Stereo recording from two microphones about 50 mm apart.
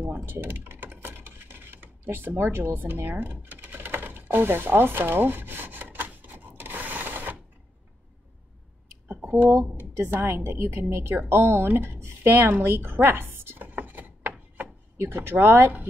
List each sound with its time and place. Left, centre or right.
0.0 s computer keyboard: right
9.0 s a sound: right
10.1 s a woman's voice: right
13.7 s chopping: right
15.0 s speech: right